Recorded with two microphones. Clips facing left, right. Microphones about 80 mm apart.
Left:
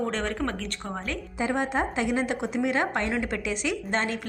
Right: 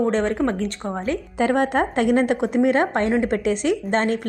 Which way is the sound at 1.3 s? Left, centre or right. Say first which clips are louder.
Right 7 dB; right.